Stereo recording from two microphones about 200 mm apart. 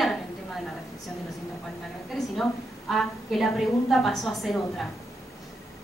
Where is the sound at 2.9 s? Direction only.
Centre (ahead or behind).